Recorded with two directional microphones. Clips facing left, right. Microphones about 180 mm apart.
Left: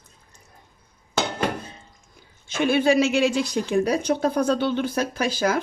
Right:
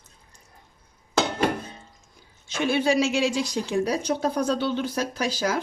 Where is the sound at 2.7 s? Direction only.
55° left (ahead or behind).